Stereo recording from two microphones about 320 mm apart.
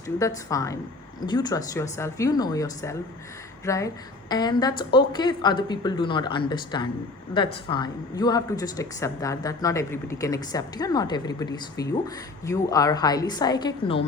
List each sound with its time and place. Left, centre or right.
0.2 s speech: centre